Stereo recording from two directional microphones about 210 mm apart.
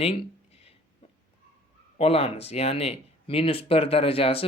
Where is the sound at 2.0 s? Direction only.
30° left (ahead or behind).